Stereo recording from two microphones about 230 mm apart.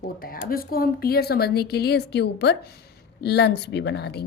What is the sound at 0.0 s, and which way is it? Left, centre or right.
Speech, left.